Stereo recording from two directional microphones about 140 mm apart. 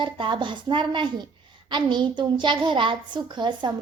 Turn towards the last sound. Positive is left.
turn(degrees=-35)  # may be behind; listen again after turning